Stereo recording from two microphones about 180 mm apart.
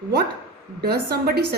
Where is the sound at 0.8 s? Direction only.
60° right (ahead or behind).